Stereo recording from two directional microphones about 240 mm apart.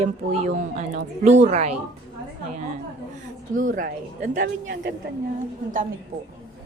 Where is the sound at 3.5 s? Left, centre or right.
Right.